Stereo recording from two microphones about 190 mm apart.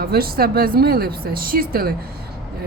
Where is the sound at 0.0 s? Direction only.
55° right (ahead or behind).